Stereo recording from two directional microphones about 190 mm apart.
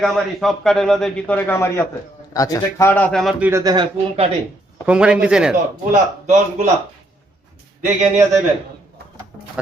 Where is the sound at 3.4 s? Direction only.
15° right (ahead or behind).